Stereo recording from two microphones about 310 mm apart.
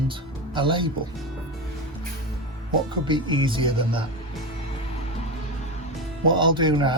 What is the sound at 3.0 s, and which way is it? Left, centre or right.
Speech, centre.